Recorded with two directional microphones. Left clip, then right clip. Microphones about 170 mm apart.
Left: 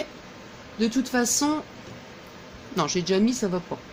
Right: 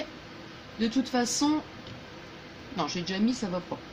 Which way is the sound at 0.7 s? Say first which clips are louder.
Left 4 dB; 70° left (ahead or behind).